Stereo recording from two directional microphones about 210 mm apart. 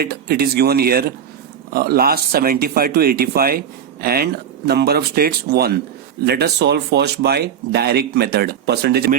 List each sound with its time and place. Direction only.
0.0 s speech: 50° right (ahead or behind)